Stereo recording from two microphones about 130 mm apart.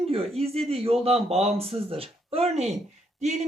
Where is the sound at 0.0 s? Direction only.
50° right (ahead or behind).